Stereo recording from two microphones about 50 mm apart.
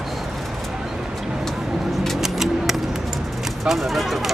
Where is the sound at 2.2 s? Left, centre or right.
Centre.